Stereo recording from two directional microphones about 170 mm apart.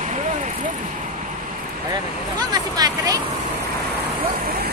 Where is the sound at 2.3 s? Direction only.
25° right (ahead or behind).